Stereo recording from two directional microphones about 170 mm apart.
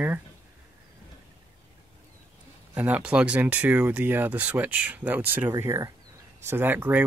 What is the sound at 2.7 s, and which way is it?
Speech, 10° right (ahead or behind).